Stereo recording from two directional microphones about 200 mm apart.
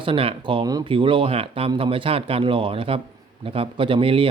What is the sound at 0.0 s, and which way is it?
Speech, 25° right (ahead or behind).